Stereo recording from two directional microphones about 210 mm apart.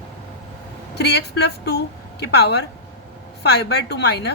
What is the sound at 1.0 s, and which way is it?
A woman's voice, 50° left (ahead or behind).